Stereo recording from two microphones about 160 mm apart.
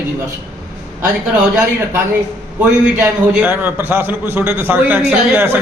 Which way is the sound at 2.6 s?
10° right (ahead or behind).